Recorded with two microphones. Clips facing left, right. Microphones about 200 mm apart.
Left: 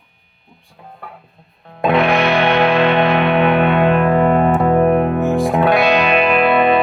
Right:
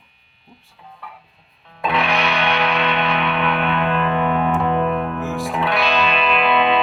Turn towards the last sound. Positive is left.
turn(degrees=55)  # may be behind; listen again after turning